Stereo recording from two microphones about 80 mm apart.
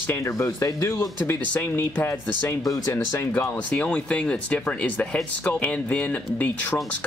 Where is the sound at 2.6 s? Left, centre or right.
Left.